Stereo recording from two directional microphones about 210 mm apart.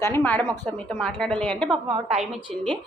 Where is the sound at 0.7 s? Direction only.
5° left (ahead or behind).